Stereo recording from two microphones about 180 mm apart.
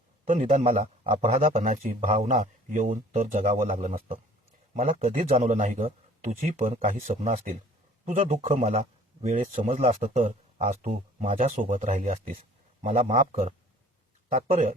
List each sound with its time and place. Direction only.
0.3 s a man's voice: 40° right (ahead or behind)
8.8 s a man's voice: 45° right (ahead or behind)